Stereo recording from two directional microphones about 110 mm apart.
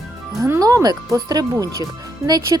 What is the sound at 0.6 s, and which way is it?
Speech, 35° right (ahead or behind).